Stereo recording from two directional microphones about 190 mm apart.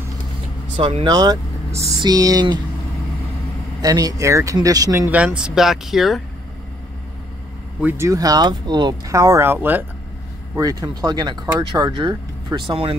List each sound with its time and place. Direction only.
0.7 s speech: 25° right (ahead or behind)
3.8 s speech: 20° right (ahead or behind); by 6.2 s centre (ahead or behind)
7.8 s speech: 15° right (ahead or behind)